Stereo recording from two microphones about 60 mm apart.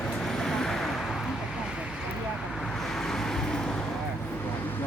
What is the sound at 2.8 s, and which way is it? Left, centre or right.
Vehicle, centre.